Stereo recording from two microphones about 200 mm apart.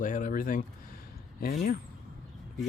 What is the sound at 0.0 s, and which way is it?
Speech, 40° left (ahead or behind).